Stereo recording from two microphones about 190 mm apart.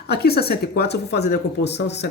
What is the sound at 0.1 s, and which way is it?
Speech, 55° left (ahead or behind).